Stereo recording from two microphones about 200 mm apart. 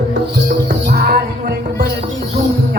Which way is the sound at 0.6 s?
50° right (ahead or behind).